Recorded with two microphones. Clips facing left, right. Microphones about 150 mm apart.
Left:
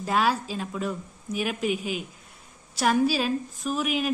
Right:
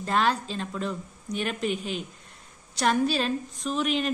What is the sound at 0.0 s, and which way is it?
A woman's voice, 5° left (ahead or behind).